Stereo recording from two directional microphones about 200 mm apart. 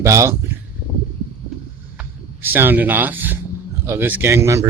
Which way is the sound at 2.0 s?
10° right (ahead or behind).